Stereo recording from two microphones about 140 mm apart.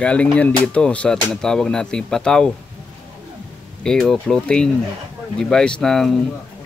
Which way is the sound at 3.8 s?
5° left (ahead or behind).